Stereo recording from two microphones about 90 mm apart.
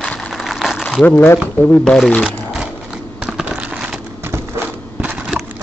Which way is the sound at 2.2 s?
5° right (ahead or behind).